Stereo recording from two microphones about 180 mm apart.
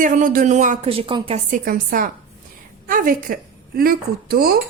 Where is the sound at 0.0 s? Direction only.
45° right (ahead or behind).